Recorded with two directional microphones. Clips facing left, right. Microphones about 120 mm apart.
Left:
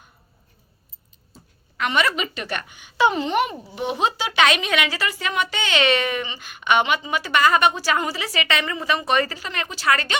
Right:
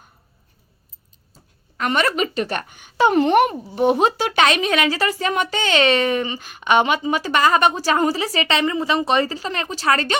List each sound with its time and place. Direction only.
1.8 s a woman's voice: 40° right (ahead or behind)